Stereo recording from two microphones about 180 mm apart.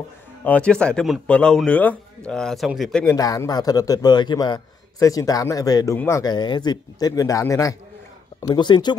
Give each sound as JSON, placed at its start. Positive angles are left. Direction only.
{"t": 0.4, "sound": "speech", "side_deg": 10}
{"t": 3.1, "sound": "a man's voice", "side_deg": 20}